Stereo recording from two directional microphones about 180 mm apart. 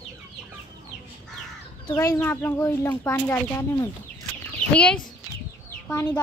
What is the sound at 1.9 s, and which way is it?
Speech, 15° left (ahead or behind).